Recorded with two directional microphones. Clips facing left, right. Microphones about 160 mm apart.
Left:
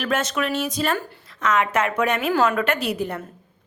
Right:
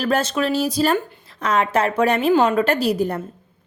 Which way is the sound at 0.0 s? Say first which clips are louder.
Right 4 dB; 30° right (ahead or behind).